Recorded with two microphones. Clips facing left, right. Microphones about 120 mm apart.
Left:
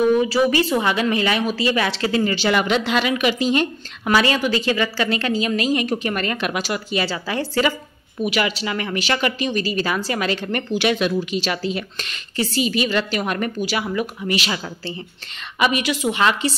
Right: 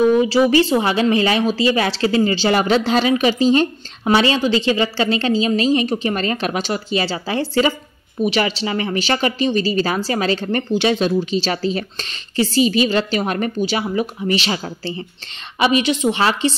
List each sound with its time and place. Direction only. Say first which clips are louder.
0.0 s a woman's voice: right 3 dB; 25° right (ahead or behind)